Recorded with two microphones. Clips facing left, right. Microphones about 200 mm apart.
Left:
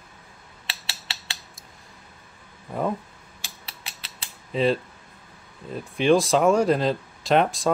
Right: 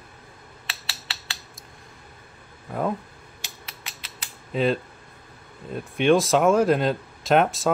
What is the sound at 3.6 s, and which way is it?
Mechanisms, 30° left (ahead or behind).